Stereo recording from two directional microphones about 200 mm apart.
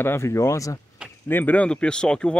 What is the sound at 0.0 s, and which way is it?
Speech, 10° left (ahead or behind).